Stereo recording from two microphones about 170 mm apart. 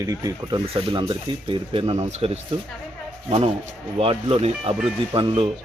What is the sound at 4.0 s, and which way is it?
Speech, 35° right (ahead or behind).